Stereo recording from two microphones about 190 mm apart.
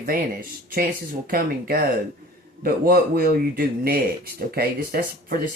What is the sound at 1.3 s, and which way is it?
Speech, 50° right (ahead or behind).